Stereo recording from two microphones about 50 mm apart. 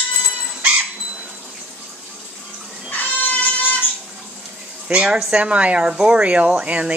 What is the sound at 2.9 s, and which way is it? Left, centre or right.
Music, left.